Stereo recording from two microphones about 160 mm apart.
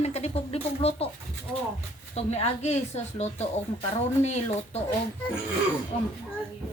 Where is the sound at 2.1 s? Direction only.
40° left (ahead or behind).